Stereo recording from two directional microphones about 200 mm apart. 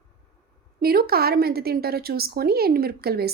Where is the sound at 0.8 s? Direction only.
50° right (ahead or behind).